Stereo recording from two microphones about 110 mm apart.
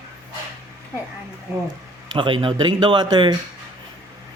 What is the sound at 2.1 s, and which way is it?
A man's voice, 50° right (ahead or behind).